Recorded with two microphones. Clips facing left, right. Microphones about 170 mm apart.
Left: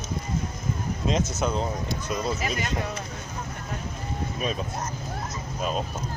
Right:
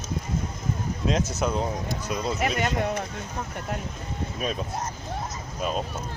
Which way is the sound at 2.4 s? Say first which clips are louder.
Right 3 dB; 65° right (ahead or behind).